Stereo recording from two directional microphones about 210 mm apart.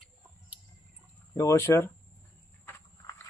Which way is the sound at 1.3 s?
15° left (ahead or behind).